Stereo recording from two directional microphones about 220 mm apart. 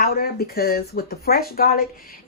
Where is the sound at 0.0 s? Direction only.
40° left (ahead or behind).